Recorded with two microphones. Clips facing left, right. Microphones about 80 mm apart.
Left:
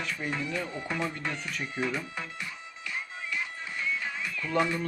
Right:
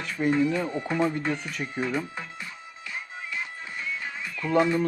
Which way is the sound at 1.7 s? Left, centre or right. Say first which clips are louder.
Right 3 dB; right.